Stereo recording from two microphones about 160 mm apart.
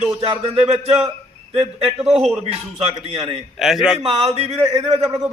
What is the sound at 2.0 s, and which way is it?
Speech, centre (ahead or behind).